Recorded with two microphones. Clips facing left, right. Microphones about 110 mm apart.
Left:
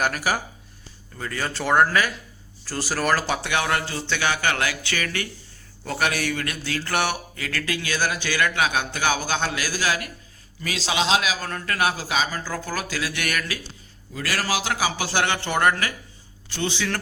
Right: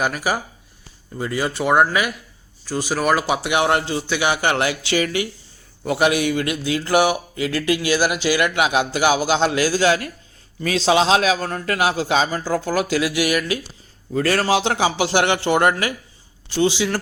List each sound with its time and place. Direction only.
0.0 s speech: centre (ahead or behind)
1.2 s a man's voice: 15° right (ahead or behind)
7.3 s a man's voice: 20° right (ahead or behind)
14.1 s a man's voice: 35° right (ahead or behind); by 17.0 s 15° right (ahead or behind)